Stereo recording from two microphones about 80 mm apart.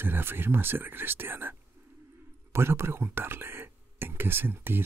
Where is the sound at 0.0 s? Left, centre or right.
Right.